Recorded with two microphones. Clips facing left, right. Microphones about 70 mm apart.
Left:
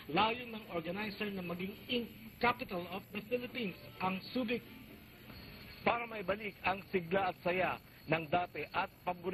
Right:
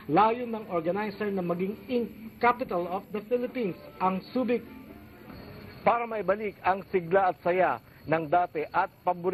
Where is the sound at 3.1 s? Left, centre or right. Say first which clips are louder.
Right 9 dB; right.